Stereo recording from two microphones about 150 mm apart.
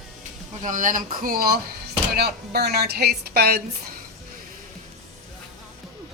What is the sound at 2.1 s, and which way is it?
Speech, 90° right.